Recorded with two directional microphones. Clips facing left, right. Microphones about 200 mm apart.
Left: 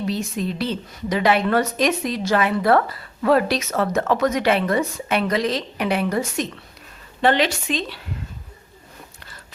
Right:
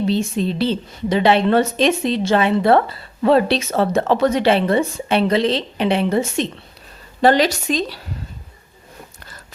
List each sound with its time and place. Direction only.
0.0 s a woman's voice: 30° right (ahead or behind)
7.2 s speech: 40° right (ahead or behind)